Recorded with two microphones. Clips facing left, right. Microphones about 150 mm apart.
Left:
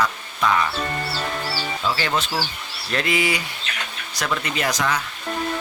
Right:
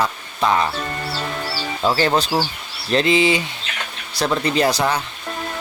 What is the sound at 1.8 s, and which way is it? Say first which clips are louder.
Speech: right 7 dB; 35° right (ahead or behind).